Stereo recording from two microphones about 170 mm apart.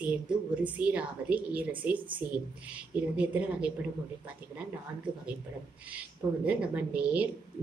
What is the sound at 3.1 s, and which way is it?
Speech, 5° right (ahead or behind).